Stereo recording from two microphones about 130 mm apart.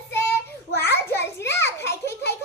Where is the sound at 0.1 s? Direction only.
20° left (ahead or behind).